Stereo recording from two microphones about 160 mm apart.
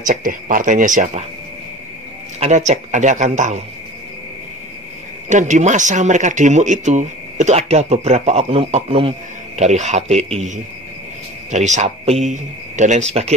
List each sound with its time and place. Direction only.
0.0 s speech: 55° right (ahead or behind)
2.4 s speech: 45° right (ahead or behind)
5.3 s speech: 50° right (ahead or behind)